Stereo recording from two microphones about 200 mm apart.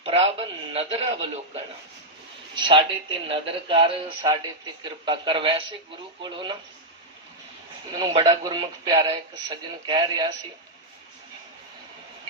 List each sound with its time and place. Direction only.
0.0 s a man's voice: 30° right (ahead or behind)
2.6 s a man's voice: 25° right (ahead or behind)
7.9 s a man's voice: 20° right (ahead or behind)